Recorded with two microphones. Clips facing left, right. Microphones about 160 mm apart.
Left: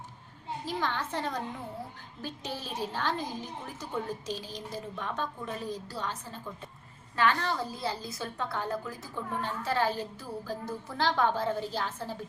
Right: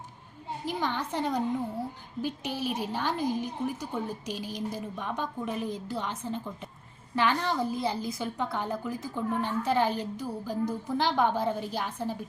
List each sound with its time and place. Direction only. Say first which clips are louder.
0.6 s a woman's voice: right 2 dB; 15° right (ahead or behind)